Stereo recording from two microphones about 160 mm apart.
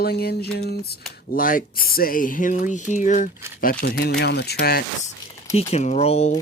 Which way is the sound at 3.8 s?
90° left.